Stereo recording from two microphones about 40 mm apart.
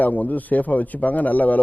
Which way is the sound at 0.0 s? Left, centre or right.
Left.